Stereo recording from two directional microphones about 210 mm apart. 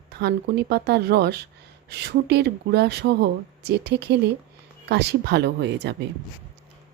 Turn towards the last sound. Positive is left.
turn(degrees=-55)  # may be behind; listen again after turning